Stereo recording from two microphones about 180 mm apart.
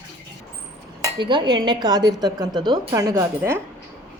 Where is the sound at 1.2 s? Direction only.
25° right (ahead or behind).